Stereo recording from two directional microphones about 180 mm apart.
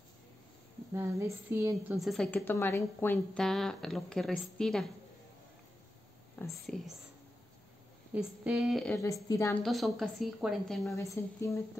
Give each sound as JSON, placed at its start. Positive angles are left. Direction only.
{"t": 0.9, "sound": "a woman's voice", "side_deg": -15}
{"t": 2.0, "sound": "speech", "side_deg": 0}
{"t": 6.3, "sound": "whispering", "side_deg": 15}
{"t": 8.1, "sound": "speech", "side_deg": -5}
{"t": 9.3, "sound": "a woman's voice", "side_deg": 15}
{"t": 9.6, "sound": "speech", "side_deg": 0}
{"t": 11.0, "sound": "a woman's voice", "side_deg": 15}